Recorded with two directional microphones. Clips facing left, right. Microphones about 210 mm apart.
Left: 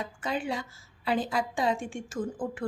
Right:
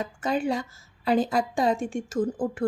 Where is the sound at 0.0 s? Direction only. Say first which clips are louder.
Right 6 dB; 45° right (ahead or behind).